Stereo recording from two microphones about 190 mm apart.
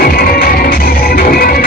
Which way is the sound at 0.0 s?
50° left (ahead or behind).